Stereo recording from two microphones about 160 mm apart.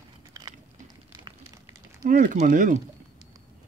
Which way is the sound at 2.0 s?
60° right (ahead or behind).